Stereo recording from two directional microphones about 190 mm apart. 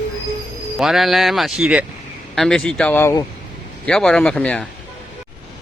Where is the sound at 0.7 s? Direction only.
Centre (ahead or behind).